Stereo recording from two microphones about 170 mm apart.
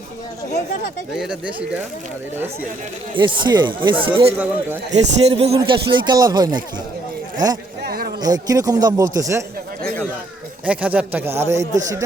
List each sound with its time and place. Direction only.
1.1 s speech: 5° right (ahead or behind)
3.2 s a man's voice: 30° right (ahead or behind)
7.9 s a sound: 65° right (ahead or behind)
8.2 s a man's voice: 20° right (ahead or behind)
10.7 s speech: 10° right (ahead or behind)